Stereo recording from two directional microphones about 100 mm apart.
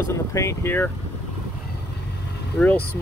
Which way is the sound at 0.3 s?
30° left (ahead or behind).